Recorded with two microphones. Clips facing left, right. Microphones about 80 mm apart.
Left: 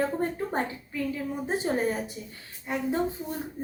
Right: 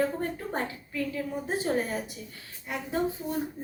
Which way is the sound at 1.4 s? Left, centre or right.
Left.